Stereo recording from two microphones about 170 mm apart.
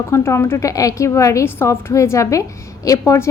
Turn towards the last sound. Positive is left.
turn(degrees=20)  # may be behind; listen again after turning